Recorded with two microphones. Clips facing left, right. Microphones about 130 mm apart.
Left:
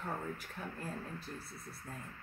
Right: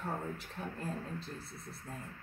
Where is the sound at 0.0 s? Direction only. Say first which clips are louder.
Right 2 dB; 25° right (ahead or behind).